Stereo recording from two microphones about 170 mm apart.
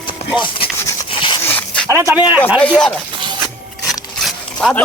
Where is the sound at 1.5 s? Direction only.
10° left (ahead or behind).